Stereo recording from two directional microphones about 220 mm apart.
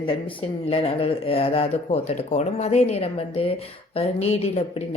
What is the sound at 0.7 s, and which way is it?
Speech, 25° left (ahead or behind).